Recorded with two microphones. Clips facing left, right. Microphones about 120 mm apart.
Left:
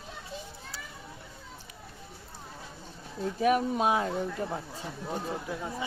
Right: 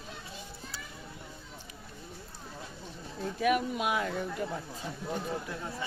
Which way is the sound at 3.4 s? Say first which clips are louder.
Left 3 dB; 35° left (ahead or behind).